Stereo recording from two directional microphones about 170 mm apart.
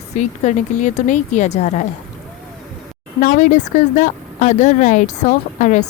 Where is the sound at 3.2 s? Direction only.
45° left (ahead or behind).